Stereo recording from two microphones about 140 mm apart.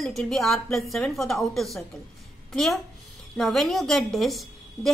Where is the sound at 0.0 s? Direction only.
Centre (ahead or behind).